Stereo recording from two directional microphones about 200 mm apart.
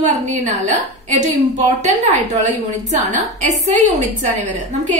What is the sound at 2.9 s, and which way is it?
A woman's voice, 35° right (ahead or behind).